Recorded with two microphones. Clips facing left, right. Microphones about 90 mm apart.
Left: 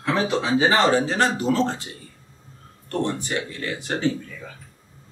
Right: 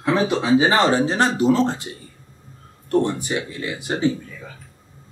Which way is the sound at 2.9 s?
15° right (ahead or behind).